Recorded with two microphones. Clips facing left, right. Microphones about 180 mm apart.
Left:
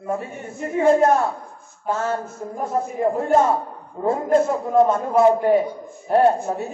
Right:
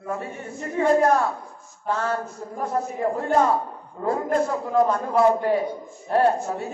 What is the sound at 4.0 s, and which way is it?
A man's voice, 25° left (ahead or behind).